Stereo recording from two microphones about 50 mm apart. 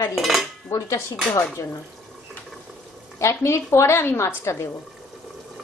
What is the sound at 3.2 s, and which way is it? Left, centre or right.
A woman's voice, left.